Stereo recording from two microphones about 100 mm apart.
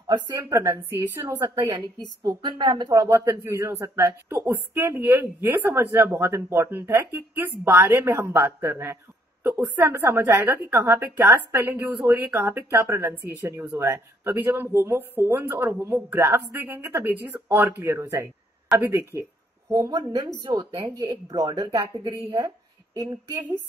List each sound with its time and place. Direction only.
0.0 s a woman's voice: 40° right (ahead or behind); by 1.4 s 25° right (ahead or behind)
1.4 s speech: 35° right (ahead or behind)
2.2 s a woman's voice: 50° right (ahead or behind)
2.9 s a woman's voice: 35° right (ahead or behind)
19.7 s speech: 40° right (ahead or behind)
20.8 s speech: 35° right (ahead or behind)